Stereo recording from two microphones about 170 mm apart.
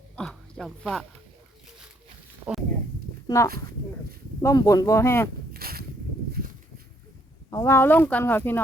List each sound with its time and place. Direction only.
0.2 s a sound: centre (ahead or behind)
3.2 s speech: 20° left (ahead or behind)
3.5 s speech: 60° right (ahead or behind)
4.4 s speech: 20° left (ahead or behind)
5.5 s a sound: 60° right (ahead or behind)
7.5 s speech: 15° left (ahead or behind)